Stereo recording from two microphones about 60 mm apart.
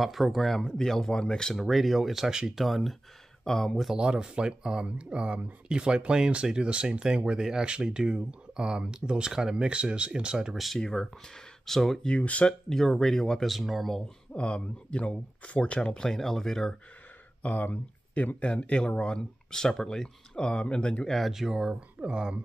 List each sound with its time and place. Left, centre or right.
0.0 s speech: centre
3.9 s speech: centre
10.8 s speech: centre
12.1 s speech: left
12.7 s speech: centre
14.3 s speech: centre
17.4 s speech: left
21.1 s speech: centre